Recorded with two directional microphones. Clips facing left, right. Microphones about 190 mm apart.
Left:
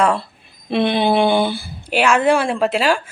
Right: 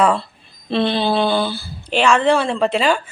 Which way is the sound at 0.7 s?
15° left (ahead or behind).